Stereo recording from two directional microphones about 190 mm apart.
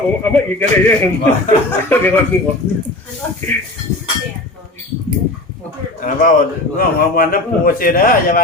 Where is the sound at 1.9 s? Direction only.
10° left (ahead or behind).